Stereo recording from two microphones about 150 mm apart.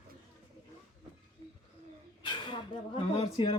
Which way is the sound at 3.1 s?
35° left (ahead or behind).